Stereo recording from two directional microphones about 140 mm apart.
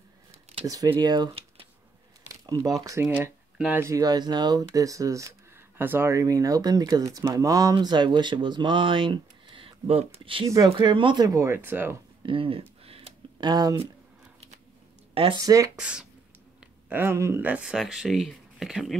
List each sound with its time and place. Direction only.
0.7 s speech: 25° right (ahead or behind)
3.1 s speech: 10° right (ahead or behind)
3.8 s speech: 25° right (ahead or behind)
12.2 s a sound: 40° right (ahead or behind)
13.5 s speech: 25° right (ahead or behind)
15.1 s speech: 40° right (ahead or behind)
15.4 s speech: 25° right (ahead or behind)
15.7 s speech: 5° right (ahead or behind)